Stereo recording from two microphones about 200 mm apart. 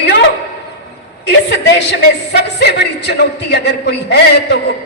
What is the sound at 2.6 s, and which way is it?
A man's voice, 55° left (ahead or behind).